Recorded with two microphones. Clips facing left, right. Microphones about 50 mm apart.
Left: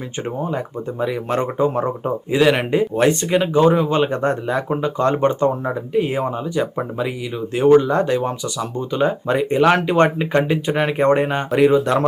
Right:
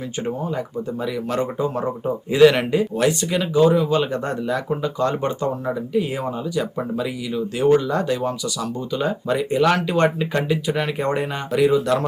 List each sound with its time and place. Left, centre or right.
0.3 s speech: left
2.3 s speech: centre
2.7 s speech: left